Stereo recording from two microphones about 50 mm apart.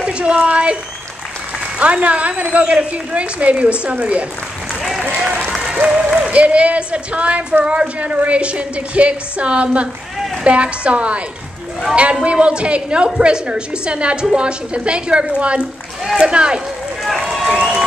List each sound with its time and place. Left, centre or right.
0.0 s a sound: right
1.8 s a woman's voice: right
5.9 s applause: centre
6.3 s a woman's voice: right